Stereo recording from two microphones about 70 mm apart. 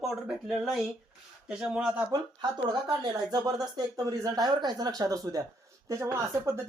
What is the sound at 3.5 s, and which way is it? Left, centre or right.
Speech, right.